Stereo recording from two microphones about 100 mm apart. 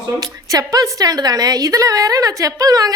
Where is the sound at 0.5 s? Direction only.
35° right (ahead or behind).